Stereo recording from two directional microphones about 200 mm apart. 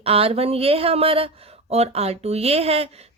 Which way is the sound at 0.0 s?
30° right (ahead or behind).